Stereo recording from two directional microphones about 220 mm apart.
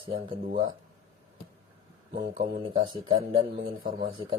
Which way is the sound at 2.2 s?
40° right (ahead or behind).